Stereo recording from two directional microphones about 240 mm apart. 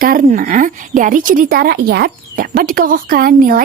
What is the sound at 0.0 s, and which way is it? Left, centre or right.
A woman's voice, right.